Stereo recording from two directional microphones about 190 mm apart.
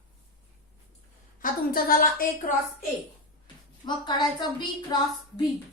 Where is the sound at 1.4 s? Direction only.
50° left (ahead or behind).